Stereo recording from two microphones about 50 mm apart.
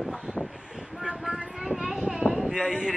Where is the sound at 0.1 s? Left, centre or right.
Centre.